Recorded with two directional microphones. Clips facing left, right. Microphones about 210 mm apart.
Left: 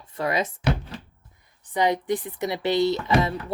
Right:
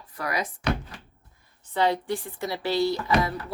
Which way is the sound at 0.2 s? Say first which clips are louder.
Left 5 dB; 25° left (ahead or behind).